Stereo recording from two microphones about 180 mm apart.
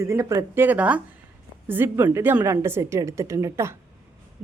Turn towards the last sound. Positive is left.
turn(degrees=-15)  # may be behind; listen again after turning